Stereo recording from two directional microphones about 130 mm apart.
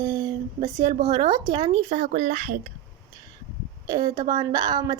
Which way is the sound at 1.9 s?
65° right (ahead or behind).